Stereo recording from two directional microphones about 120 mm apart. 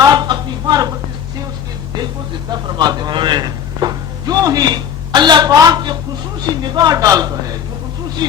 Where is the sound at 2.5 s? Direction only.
40° right (ahead or behind).